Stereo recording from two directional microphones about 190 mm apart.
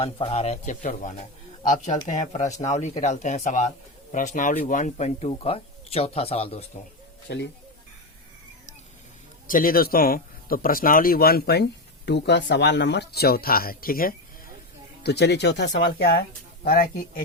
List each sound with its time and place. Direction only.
0.0 s speech: 30° left (ahead or behind)
7.3 s speech: 65° left (ahead or behind)
9.5 s speech: 45° left (ahead or behind)